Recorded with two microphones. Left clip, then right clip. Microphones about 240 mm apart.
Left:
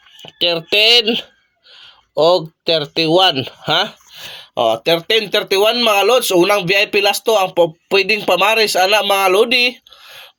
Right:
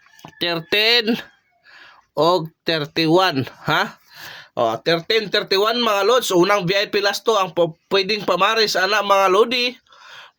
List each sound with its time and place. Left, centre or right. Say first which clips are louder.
0.2 s speech: left 6 dB; right
2.2 s speech: left 5 dB; right
3.7 s speech: left 3 dB; right; by 10.2 s centre